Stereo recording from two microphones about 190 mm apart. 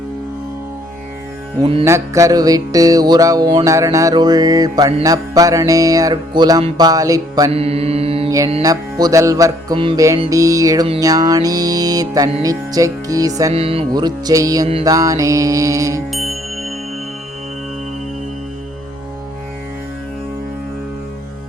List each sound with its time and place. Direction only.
1.8 s music: 15° right (ahead or behind)
7.5 s mantra: 30° right (ahead or behind)
8.6 s music: 20° right (ahead or behind)
13.5 s music: 30° right (ahead or behind)
16.1 s music: centre (ahead or behind)